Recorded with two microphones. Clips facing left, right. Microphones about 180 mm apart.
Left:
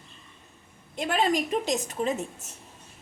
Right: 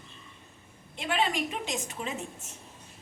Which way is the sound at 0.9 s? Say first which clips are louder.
Left 4 dB; 40° left (ahead or behind).